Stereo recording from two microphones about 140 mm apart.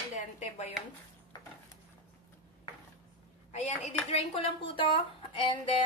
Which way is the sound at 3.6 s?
50° left (ahead or behind).